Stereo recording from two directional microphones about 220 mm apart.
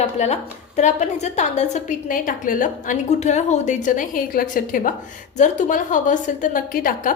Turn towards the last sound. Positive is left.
turn(degrees=40)  # may be behind; listen again after turning